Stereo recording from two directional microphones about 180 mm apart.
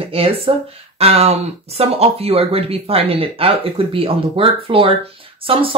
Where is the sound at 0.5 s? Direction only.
30° right (ahead or behind).